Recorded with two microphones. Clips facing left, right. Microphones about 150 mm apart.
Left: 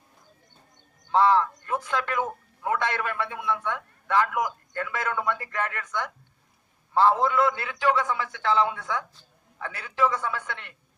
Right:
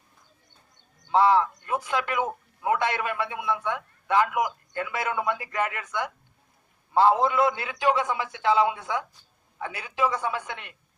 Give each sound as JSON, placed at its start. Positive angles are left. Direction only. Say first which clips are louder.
{"t": 1.1, "sound": "speech", "louder": "even", "side_deg": -10}